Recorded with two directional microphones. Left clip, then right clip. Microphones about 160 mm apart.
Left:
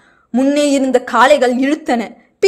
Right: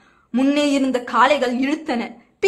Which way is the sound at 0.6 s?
25° left (ahead or behind).